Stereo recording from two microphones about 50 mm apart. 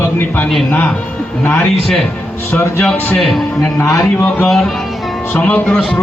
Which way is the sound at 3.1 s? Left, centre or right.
Centre.